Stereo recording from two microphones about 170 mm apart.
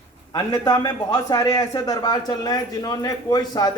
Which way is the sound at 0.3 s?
20° left (ahead or behind).